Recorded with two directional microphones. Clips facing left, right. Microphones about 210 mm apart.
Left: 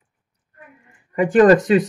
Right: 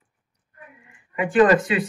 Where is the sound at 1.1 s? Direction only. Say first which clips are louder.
Left 4 dB; 40° left (ahead or behind).